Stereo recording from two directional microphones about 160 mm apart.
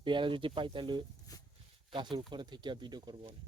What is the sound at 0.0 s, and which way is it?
Speech, 30° right (ahead or behind).